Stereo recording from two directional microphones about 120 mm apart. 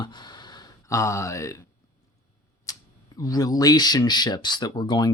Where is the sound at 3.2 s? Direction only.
30° left (ahead or behind).